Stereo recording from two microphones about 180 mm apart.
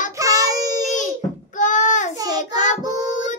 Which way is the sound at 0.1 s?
20° right (ahead or behind).